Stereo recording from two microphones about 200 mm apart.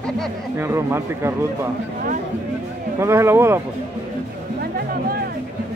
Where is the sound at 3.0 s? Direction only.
15° right (ahead or behind).